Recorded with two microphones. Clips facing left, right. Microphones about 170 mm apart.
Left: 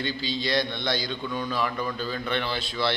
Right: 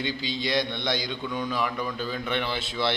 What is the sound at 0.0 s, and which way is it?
A man's voice, 15° right (ahead or behind).